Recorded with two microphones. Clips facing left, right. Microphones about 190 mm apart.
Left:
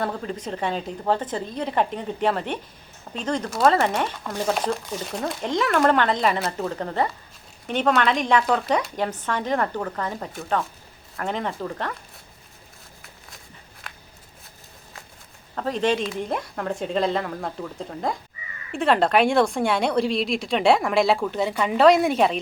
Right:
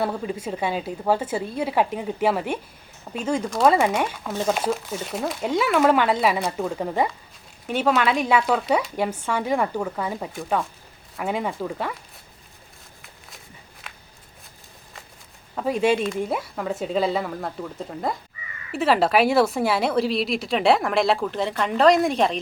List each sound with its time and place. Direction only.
0.0 s a woman's voice: 10° right (ahead or behind)
6.7 s a woman's voice: 10° right (ahead or behind)
15.5 s a woman's voice: 10° right (ahead or behind)